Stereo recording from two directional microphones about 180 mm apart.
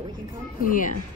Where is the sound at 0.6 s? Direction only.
50° left (ahead or behind).